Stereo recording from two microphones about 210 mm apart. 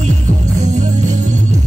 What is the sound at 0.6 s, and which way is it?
Music, 35° right (ahead or behind).